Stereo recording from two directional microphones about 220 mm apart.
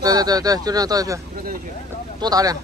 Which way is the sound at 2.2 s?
15° right (ahead or behind).